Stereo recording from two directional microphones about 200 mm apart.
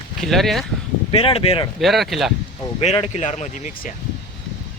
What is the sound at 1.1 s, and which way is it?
Speech, 25° left (ahead or behind).